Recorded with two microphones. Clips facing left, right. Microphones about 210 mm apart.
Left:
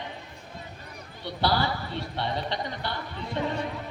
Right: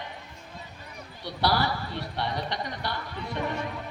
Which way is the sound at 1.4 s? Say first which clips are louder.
Even; 20° left (ahead or behind).